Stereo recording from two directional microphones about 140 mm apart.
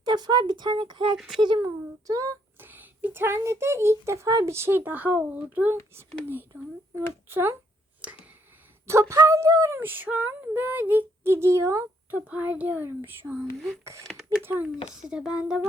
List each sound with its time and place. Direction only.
0.0 s speech: 30° right (ahead or behind)
1.1 s speech: centre (ahead or behind)
1.4 s a child's voice: 30° right (ahead or behind); by 7.5 s 15° right (ahead or behind)
8.0 s finger snapping: 10° right (ahead or behind)
8.9 s a child's voice: 20° right (ahead or behind)
12.3 s a child's voice: 10° right (ahead or behind)